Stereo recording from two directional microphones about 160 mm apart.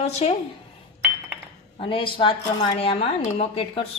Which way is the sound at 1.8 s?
35° left (ahead or behind).